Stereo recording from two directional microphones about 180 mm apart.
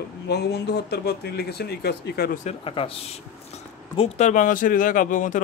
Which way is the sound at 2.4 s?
30° left (ahead or behind).